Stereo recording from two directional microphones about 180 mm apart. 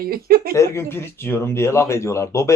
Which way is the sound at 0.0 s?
55° right (ahead or behind).